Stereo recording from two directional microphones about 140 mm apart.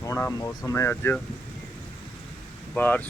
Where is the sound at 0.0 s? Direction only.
20° left (ahead or behind).